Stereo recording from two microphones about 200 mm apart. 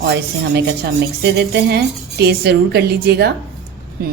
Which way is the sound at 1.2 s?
55° right (ahead or behind).